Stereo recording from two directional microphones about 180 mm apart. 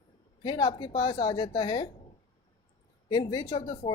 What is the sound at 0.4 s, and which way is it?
Speech, 25° left (ahead or behind).